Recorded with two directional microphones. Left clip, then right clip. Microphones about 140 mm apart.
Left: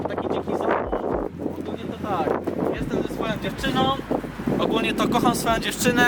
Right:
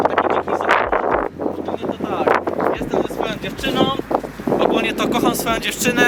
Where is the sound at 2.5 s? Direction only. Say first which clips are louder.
Right 6 dB; 35° right (ahead or behind).